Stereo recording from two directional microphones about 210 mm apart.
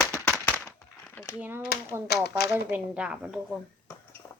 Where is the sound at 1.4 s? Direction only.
10° right (ahead or behind).